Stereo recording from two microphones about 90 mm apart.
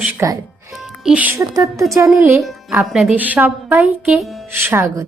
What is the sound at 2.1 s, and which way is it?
Speech, 25° right (ahead or behind).